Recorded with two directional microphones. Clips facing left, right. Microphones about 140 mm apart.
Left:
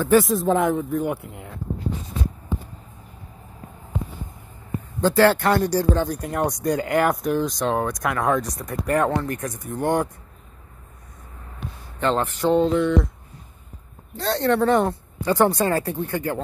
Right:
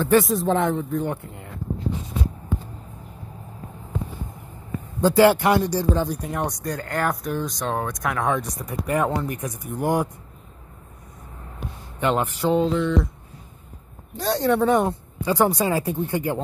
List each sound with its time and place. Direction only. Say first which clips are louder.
0.0 s speech: left 1 dB; centre (ahead or behind)
5.0 s speech: right 1 dB; 15° right (ahead or behind)
5.6 s speech: left 1 dB; centre (ahead or behind)
12.0 s speech: left 1 dB; 10° right (ahead or behind)
14.1 s speech: even; 15° right (ahead or behind)